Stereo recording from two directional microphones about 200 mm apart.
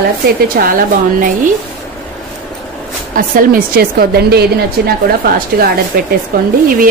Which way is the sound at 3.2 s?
45° right (ahead or behind).